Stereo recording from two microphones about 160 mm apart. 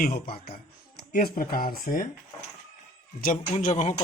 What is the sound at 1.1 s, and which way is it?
Speech, 65° left (ahead or behind).